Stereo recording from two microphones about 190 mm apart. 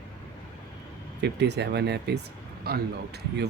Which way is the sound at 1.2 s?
60° right (ahead or behind).